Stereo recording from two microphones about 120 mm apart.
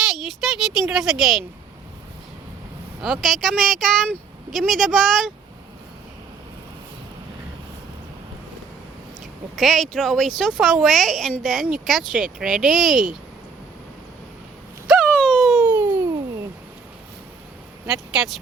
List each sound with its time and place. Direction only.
0.0 s speech: centre (ahead or behind)
3.0 s a woman's voice: centre (ahead or behind)
9.6 s a woman's voice: centre (ahead or behind)
14.8 s a sound: centre (ahead or behind)
15.6 s a sound: 15° right (ahead or behind)
17.8 s a woman's voice: 5° right (ahead or behind)